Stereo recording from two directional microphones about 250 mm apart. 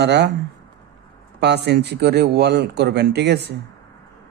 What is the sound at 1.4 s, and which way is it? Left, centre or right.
Speech, right.